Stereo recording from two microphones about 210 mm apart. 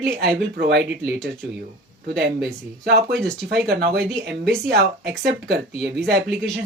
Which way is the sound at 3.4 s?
50° right (ahead or behind).